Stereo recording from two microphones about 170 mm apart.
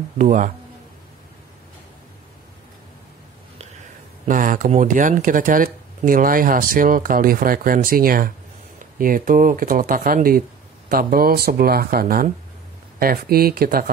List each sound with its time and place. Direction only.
0.2 s a man's voice: 50° right (ahead or behind)
4.3 s speech: 50° right (ahead or behind)